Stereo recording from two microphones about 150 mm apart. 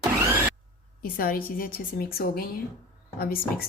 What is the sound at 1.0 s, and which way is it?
A woman's voice, 75° left (ahead or behind).